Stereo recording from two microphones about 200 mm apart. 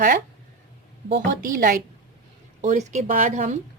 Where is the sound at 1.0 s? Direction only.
50° right (ahead or behind).